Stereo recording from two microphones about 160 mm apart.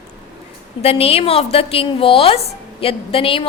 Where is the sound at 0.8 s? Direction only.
35° left (ahead or behind).